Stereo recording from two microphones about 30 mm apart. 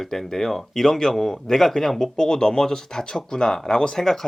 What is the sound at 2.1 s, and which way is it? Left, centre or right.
Speech, left.